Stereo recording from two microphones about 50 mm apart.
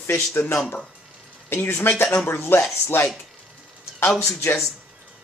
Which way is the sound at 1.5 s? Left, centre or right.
Left.